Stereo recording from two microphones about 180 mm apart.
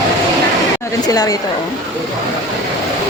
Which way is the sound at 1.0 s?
20° left (ahead or behind).